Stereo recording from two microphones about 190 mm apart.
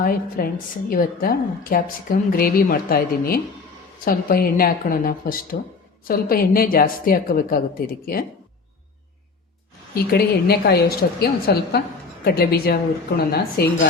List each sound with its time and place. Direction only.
0.0 s a woman's voice: 50° left (ahead or behind)
9.9 s a woman's voice: 55° left (ahead or behind)